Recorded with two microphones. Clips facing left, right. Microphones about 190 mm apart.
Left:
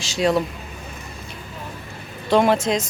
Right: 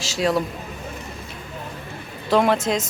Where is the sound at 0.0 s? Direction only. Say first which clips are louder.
Left 2 dB; centre (ahead or behind).